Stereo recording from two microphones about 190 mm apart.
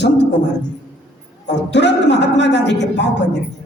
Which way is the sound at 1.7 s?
65° left (ahead or behind).